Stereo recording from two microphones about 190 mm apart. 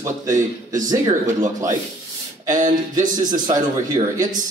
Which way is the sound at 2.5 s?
45° right (ahead or behind).